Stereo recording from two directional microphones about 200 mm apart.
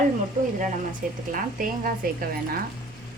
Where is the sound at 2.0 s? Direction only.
45° right (ahead or behind).